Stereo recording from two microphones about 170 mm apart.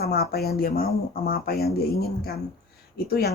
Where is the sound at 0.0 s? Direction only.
65° left (ahead or behind).